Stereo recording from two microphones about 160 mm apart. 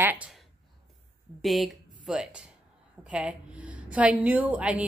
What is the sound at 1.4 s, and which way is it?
A woman's voice, centre (ahead or behind).